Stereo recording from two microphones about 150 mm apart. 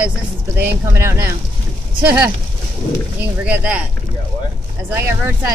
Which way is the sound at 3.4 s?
10° right (ahead or behind).